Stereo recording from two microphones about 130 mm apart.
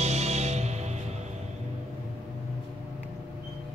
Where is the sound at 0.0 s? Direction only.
55° right (ahead or behind).